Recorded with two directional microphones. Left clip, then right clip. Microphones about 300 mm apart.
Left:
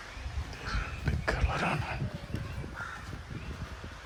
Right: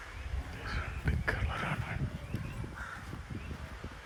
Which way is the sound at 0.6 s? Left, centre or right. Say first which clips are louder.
Left 2 dB; centre.